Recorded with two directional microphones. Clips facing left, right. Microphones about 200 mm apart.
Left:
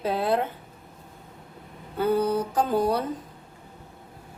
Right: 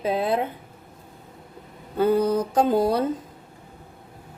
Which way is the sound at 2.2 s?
40° right (ahead or behind).